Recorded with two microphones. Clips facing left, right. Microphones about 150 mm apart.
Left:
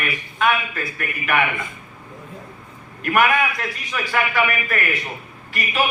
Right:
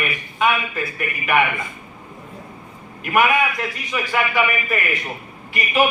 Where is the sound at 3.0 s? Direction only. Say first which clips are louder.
Right 1 dB; 10° right (ahead or behind).